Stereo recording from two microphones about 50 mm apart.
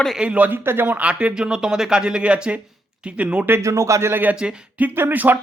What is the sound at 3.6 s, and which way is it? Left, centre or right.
Speech, right.